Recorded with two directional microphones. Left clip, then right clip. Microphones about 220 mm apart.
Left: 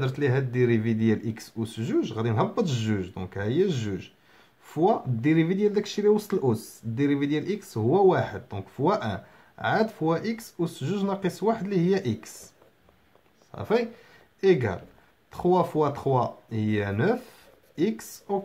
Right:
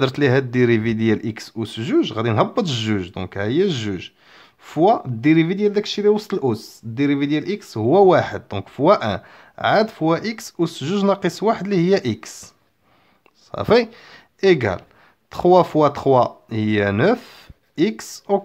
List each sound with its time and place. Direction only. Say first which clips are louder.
0.0 s speech: right 9 dB; 35° right (ahead or behind)
13.5 s speech: right 10 dB; 40° right (ahead or behind)